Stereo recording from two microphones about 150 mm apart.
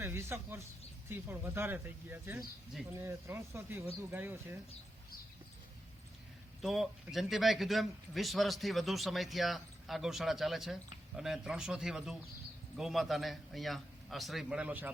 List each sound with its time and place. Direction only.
0.0 s speech: 15° right (ahead or behind)
6.6 s a man's voice: centre (ahead or behind)